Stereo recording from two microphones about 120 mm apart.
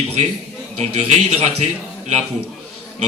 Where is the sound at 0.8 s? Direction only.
65° right (ahead or behind).